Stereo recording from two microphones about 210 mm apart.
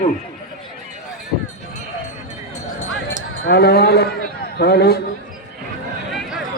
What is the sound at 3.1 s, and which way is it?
A man's voice, 50° left (ahead or behind).